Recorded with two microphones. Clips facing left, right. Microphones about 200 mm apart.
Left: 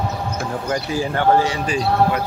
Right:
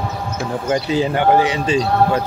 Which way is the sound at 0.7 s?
20° right (ahead or behind).